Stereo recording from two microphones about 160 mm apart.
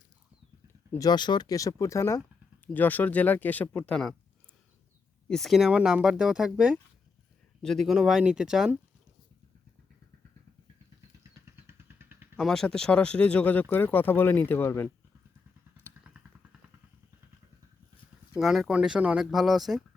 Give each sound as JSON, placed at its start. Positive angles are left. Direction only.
{"t": 0.9, "sound": "speech", "side_deg": 25}
{"t": 5.3, "sound": "speech", "side_deg": 0}
{"t": 11.6, "sound": "vehicle", "side_deg": -15}
{"t": 12.4, "sound": "speech", "side_deg": 5}
{"t": 16.1, "sound": "vehicle", "side_deg": -10}
{"t": 18.3, "sound": "speech", "side_deg": 0}